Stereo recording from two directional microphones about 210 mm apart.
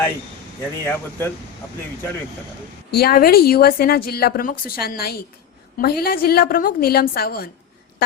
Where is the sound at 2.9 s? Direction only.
45° left (ahead or behind).